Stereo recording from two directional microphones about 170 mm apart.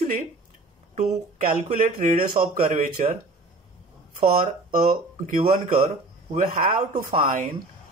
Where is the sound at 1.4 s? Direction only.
45° right (ahead or behind).